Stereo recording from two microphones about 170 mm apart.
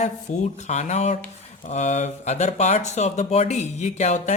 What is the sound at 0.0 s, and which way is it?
Speech, 40° left (ahead or behind).